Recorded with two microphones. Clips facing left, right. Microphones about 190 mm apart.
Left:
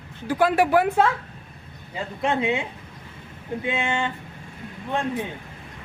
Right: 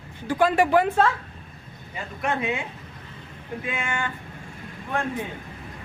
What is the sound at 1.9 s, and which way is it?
Speech, 25° left (ahead or behind).